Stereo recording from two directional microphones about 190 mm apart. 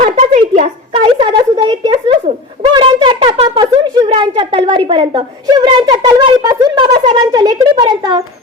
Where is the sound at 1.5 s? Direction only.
20° right (ahead or behind).